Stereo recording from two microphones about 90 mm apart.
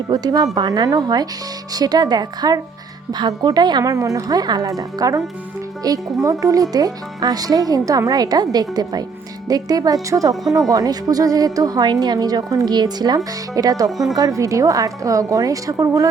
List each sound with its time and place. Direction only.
0.1 s speech: 50° right (ahead or behind)
3.9 s a woman's voice: 40° right (ahead or behind)